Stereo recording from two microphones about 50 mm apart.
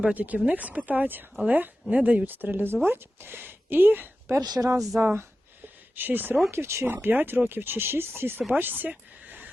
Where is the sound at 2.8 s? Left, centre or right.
Right.